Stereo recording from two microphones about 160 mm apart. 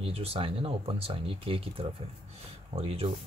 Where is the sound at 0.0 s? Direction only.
40° right (ahead or behind).